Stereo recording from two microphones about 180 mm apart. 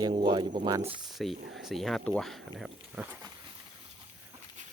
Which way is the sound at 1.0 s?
Centre (ahead or behind).